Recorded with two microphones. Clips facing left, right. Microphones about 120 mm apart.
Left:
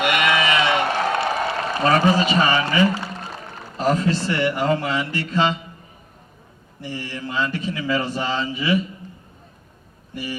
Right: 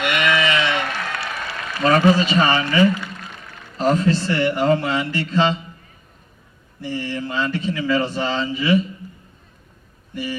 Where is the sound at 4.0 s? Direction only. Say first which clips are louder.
Right 2 dB; 25° left (ahead or behind).